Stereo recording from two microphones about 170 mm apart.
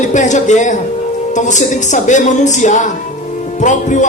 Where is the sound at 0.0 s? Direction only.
45° left (ahead or behind).